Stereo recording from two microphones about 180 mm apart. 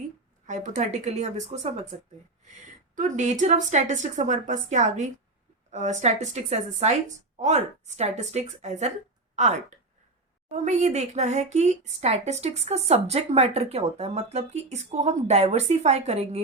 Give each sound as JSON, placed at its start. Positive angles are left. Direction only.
{"t": 0.4, "sound": "speech", "side_deg": -45}
{"t": 2.9, "sound": "a woman's voice", "side_deg": -45}